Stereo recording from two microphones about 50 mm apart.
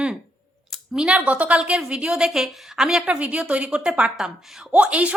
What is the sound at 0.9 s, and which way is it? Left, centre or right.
Speech, centre.